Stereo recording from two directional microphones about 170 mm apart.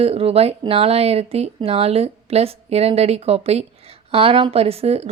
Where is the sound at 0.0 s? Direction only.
35° right (ahead or behind).